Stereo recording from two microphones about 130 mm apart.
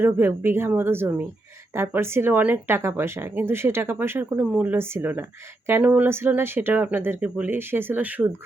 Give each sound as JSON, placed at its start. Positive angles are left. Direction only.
{"t": 0.0, "sound": "speech", "side_deg": -15}